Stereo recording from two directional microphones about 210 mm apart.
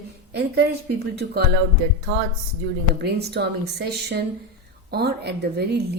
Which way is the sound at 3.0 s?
50° right (ahead or behind).